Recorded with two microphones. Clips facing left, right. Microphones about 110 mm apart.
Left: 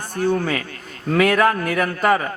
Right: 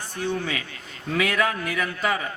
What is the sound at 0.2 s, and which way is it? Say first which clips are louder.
Speech: left 7 dB; 50° left (ahead or behind).